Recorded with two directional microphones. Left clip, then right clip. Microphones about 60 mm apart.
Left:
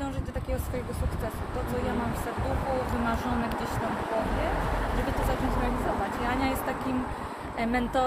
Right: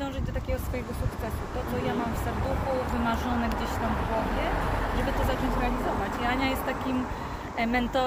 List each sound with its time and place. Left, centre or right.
3.4 s speech: right
5.6 s speech: centre
6.2 s speech: centre